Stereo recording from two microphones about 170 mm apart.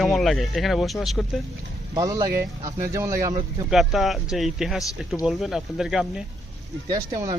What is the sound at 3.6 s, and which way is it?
Speech, centre (ahead or behind).